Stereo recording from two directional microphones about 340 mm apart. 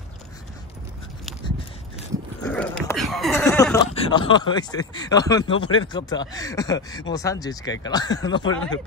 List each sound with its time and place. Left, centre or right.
2.4 s speech: centre